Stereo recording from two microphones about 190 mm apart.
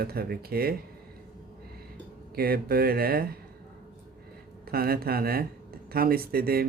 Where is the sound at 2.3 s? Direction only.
50° right (ahead or behind).